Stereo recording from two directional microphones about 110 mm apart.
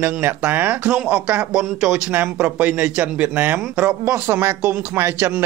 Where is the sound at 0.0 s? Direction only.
20° right (ahead or behind).